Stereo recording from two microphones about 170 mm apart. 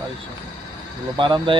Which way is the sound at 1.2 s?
30° right (ahead or behind).